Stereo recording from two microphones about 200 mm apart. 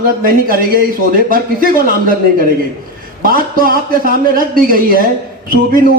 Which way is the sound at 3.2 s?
45° right (ahead or behind).